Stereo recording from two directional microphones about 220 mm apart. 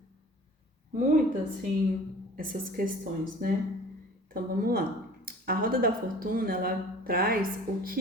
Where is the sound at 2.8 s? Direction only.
40° right (ahead or behind).